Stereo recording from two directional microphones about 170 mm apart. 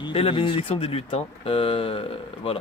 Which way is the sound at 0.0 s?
35° left (ahead or behind).